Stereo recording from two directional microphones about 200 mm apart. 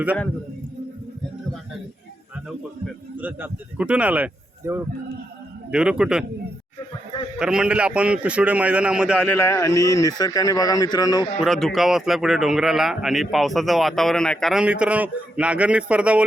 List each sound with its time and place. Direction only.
2.8 s speech: 10° right (ahead or behind)
7.3 s speech: 5° right (ahead or behind)
9.1 s speech: 10° left (ahead or behind)
11.4 s speech: centre (ahead or behind)